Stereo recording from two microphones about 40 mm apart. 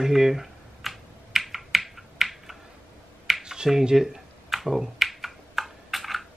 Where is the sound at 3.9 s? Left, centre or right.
Centre.